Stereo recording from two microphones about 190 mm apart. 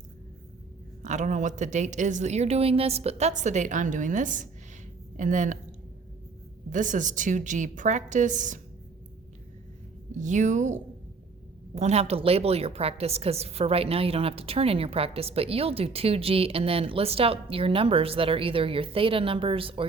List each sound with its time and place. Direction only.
1.0 s a woman's voice: 40° right (ahead or behind)
6.7 s a woman's voice: 40° right (ahead or behind)
10.1 s a woman's voice: 40° right (ahead or behind)